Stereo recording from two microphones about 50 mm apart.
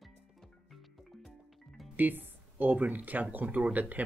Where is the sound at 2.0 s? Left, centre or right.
Right.